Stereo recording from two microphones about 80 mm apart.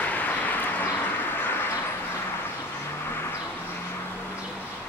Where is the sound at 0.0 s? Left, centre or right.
Left.